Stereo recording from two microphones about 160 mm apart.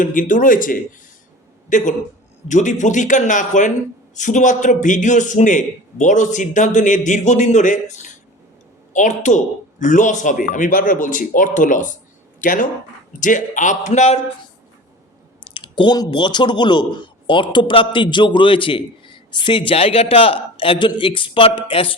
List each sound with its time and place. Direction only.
0.0 s a man's voice: 55° left (ahead or behind)
15.5 s speech: 30° left (ahead or behind)